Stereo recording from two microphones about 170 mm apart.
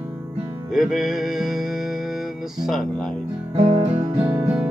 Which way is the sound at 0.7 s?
Centre (ahead or behind).